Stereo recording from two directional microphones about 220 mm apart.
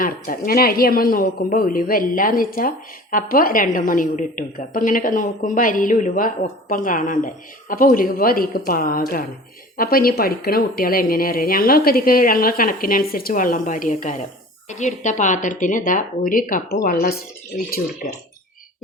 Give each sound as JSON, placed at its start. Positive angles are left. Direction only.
{"t": 0.0, "sound": "speech", "side_deg": 40}